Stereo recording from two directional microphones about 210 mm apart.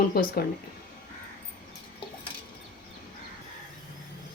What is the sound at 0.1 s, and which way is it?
Speech, 50° left (ahead or behind).